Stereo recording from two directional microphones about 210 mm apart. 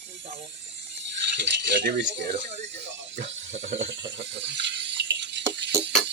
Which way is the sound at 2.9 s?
60° right (ahead or behind).